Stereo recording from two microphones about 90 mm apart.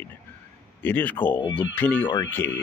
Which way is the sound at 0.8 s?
20° left (ahead or behind).